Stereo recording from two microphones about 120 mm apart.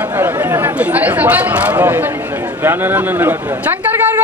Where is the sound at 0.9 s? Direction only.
15° right (ahead or behind).